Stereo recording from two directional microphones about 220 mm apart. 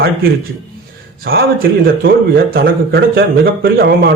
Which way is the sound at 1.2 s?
40° right (ahead or behind).